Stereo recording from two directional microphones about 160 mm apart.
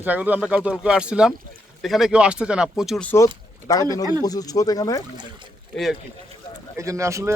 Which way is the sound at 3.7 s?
20° left (ahead or behind).